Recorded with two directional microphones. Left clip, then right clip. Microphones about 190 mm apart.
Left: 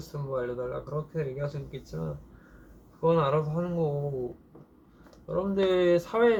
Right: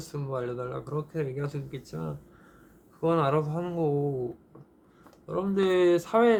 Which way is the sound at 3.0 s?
40° right (ahead or behind).